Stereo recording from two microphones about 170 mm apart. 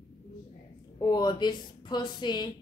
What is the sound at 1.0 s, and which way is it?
A woman's voice, 25° left (ahead or behind).